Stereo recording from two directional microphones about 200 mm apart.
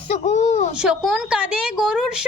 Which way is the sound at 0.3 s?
35° left (ahead or behind).